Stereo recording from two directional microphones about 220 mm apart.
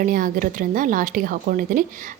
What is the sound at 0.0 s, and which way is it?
Speech, 40° right (ahead or behind).